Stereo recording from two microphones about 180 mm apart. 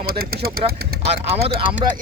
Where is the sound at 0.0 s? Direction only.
55° right (ahead or behind).